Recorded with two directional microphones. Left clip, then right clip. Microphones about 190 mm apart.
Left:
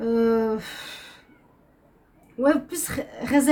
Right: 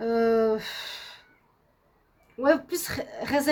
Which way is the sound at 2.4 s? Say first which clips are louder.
Left 1 dB; 55° right (ahead or behind).